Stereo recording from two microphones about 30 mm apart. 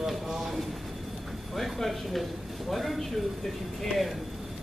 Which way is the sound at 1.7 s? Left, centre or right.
Centre.